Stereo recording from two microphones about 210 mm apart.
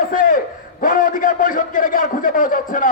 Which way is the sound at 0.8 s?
40° left (ahead or behind).